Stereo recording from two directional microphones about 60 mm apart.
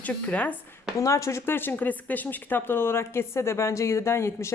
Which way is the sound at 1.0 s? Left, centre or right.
Left.